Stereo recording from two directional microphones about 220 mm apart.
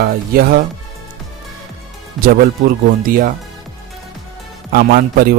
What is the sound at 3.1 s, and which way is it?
Speech, 40° right (ahead or behind).